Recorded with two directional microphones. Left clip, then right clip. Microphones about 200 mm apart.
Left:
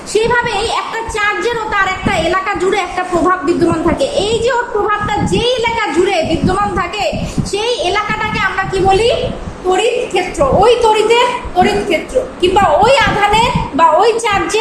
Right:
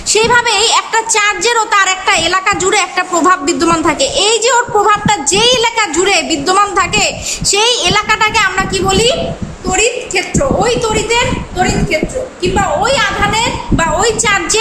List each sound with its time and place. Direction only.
0.1 s a woman's voice: 30° right (ahead or behind)
10.6 s a man's voice: centre (ahead or behind)
13.7 s a woman's voice: 15° right (ahead or behind)